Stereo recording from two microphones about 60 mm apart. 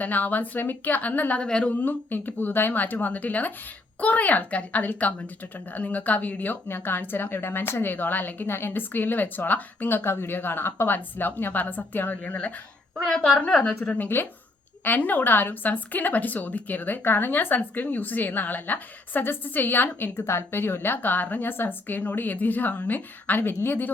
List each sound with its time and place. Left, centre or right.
0.0 s a woman's voice: left
1.4 s a woman's voice: centre
1.8 s a woman's voice: left
13.1 s a woman's voice: centre
13.5 s a woman's voice: centre
13.9 s a woman's voice: left
20.1 s a woman's voice: left